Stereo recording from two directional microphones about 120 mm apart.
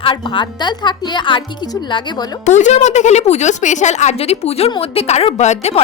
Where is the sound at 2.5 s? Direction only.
80° left.